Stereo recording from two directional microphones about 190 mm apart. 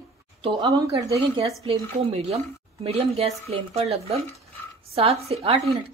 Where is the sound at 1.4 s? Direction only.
30° right (ahead or behind).